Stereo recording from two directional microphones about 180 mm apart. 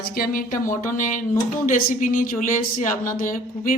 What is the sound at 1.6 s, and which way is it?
Speech, 45° left (ahead or behind).